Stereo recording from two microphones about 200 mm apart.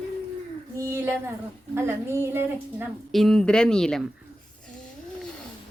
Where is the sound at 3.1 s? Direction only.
Centre (ahead or behind).